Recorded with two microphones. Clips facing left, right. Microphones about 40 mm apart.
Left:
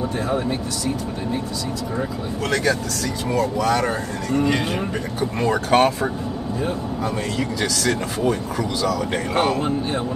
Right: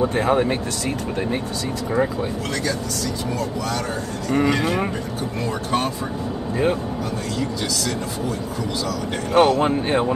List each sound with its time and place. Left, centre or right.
0.3 s speech: right
3.3 s speech: left
4.3 s speech: right
5.5 s speech: left
9.3 s speech: right